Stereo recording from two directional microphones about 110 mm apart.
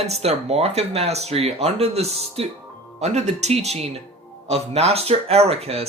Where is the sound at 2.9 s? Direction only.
85° right; by 5.8 s 65° right (ahead or behind).